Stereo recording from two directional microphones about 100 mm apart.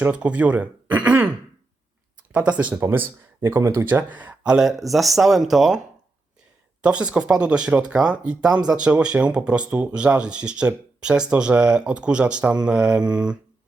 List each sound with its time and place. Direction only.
0.0 s speech: 10° right (ahead or behind)
2.3 s speech: 15° right (ahead or behind)
6.8 s speech: 10° right (ahead or behind)